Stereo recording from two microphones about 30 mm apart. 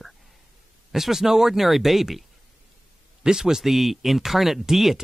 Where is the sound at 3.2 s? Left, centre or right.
Right.